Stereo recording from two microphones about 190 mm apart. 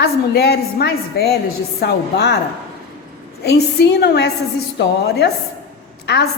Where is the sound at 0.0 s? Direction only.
60° left (ahead or behind).